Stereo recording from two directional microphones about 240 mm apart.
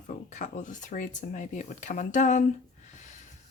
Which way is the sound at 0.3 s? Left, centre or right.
Left.